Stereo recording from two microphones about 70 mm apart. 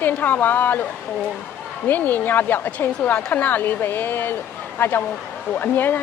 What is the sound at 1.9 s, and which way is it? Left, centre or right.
Speech, left.